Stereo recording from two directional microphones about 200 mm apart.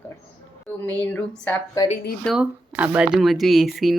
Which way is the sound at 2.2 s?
Centre (ahead or behind).